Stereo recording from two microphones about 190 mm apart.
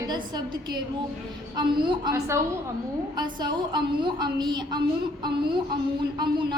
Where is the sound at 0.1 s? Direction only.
20° right (ahead or behind).